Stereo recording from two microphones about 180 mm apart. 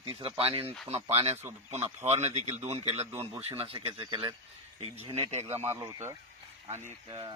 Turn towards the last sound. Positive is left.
turn(degrees=-25)  # may be behind; listen again after turning